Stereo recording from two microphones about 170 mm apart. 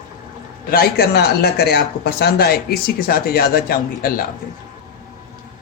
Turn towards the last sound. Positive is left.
turn(degrees=60)  # may be behind; listen again after turning